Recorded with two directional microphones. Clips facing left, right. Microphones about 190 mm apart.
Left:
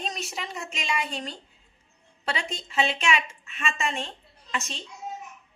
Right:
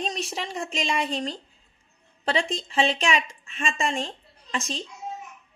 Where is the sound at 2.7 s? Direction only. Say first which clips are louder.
Even; 35° right (ahead or behind).